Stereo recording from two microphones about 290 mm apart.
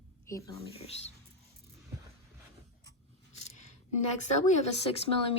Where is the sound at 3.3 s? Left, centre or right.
Left.